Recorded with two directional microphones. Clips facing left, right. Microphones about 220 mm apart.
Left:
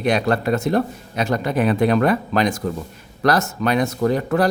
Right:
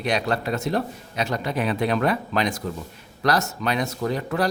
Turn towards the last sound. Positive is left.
turn(degrees=50)  # may be behind; listen again after turning